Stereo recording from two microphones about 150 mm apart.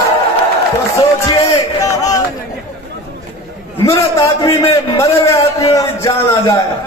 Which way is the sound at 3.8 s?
20° left (ahead or behind).